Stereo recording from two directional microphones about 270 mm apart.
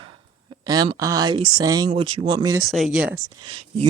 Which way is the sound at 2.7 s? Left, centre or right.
Centre.